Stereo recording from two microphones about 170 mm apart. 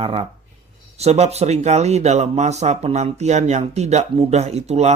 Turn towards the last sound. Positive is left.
turn(degrees=-40)  # may be behind; listen again after turning